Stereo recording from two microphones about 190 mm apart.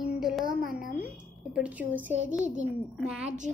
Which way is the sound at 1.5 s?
5° right (ahead or behind).